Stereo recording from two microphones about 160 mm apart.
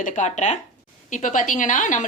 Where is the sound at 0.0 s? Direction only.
50° left (ahead or behind).